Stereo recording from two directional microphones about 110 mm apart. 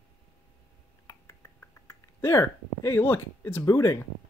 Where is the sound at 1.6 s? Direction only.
25° left (ahead or behind).